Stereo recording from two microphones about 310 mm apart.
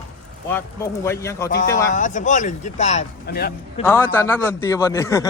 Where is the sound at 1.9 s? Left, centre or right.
Left.